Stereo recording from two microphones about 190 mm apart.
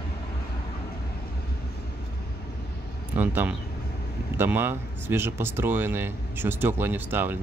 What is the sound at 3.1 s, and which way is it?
Speech, 10° right (ahead or behind).